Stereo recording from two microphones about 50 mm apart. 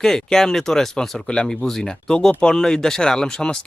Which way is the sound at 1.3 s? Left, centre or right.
Centre.